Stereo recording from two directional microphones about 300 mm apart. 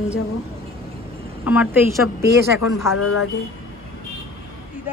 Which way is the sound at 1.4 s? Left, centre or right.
Centre.